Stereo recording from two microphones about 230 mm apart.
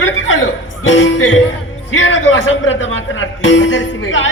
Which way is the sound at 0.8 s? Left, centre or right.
Left.